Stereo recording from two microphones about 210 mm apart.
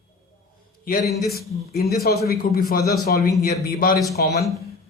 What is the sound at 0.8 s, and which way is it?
Speech, 40° left (ahead or behind).